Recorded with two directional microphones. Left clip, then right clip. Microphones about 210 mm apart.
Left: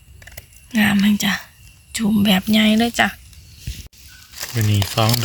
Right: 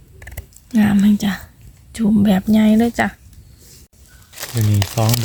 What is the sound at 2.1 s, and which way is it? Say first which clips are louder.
Speech: even; 35° right (ahead or behind).